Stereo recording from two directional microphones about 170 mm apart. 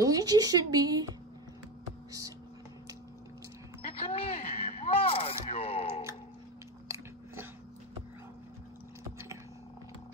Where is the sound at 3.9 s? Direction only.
35° left (ahead or behind).